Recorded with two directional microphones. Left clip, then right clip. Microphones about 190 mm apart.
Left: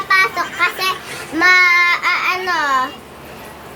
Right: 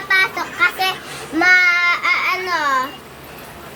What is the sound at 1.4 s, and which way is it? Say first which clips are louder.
Babbling: left 2 dB; 15° left (ahead or behind).